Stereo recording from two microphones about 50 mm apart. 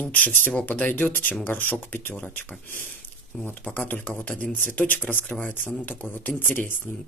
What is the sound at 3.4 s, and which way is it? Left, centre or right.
Speech, left.